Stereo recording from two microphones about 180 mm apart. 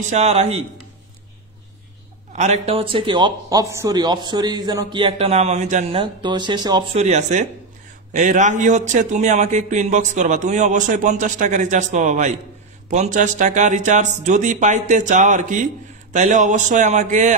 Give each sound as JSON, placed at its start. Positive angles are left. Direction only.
{"t": 0.1, "sound": "speech", "side_deg": -35}
{"t": 2.3, "sound": "speech", "side_deg": -40}
{"t": 5.9, "sound": "a man's voice", "side_deg": -25}